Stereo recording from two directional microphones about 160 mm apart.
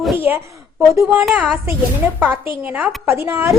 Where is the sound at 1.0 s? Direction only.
5° right (ahead or behind).